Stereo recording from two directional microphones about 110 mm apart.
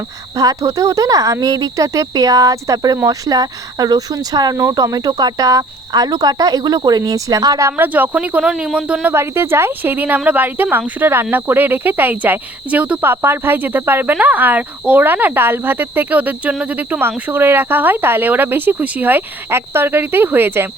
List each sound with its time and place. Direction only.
0.3 s speech: 30° right (ahead or behind)
7.7 s speech: 15° right (ahead or behind)
9.0 s speech: 20° right (ahead or behind)